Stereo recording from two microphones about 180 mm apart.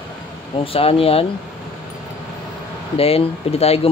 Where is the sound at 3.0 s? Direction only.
30° left (ahead or behind).